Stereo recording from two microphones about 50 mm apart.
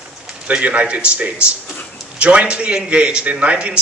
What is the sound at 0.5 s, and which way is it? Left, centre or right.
A man's voice, right.